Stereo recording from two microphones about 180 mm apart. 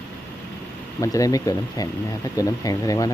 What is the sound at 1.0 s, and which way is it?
Speech, 20° left (ahead or behind).